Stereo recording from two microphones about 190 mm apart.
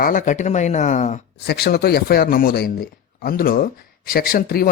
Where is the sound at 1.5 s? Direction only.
55° left (ahead or behind).